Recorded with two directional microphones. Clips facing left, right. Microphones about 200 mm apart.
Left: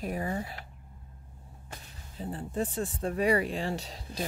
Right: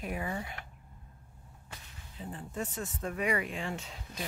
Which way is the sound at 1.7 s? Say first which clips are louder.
Left 3 dB; 40° left (ahead or behind).